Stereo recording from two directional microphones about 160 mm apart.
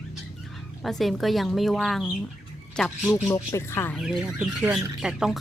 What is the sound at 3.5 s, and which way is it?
Speech, 15° left (ahead or behind).